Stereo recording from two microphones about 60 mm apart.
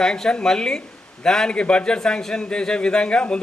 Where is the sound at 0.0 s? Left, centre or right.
Centre.